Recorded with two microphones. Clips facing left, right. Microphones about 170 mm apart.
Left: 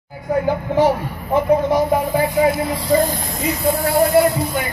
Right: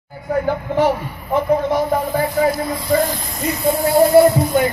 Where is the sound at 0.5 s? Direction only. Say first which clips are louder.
Left 1 dB; 15° left (ahead or behind).